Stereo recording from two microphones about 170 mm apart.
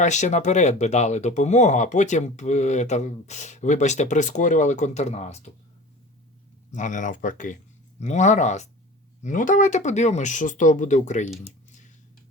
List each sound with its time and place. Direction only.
0.0 s speech: 45° left (ahead or behind)
6.7 s speech: 45° left (ahead or behind)